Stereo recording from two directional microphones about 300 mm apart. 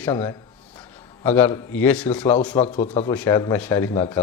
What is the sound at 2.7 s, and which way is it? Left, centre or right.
Speech, left.